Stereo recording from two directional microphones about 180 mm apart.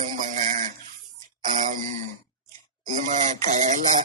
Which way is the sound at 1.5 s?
45° right (ahead or behind).